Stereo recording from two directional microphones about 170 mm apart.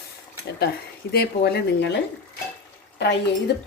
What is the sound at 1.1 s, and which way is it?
Speech, 70° left (ahead or behind).